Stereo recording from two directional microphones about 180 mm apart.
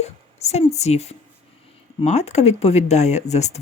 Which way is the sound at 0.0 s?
35° left (ahead or behind).